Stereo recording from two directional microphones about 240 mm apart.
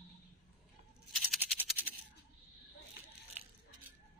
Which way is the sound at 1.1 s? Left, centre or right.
Centre.